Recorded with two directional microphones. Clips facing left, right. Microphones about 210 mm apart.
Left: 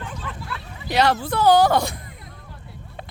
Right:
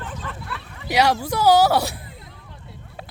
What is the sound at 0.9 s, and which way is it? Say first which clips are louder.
Speech: even; 10° right (ahead or behind).